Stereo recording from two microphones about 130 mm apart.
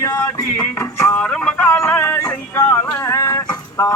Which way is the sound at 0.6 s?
15° left (ahead or behind).